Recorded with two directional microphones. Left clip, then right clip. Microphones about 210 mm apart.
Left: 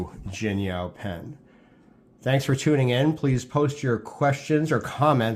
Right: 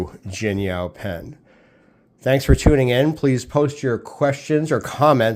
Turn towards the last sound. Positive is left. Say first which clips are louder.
# right 6 dB
turn(degrees=-35)  # may be behind; listen again after turning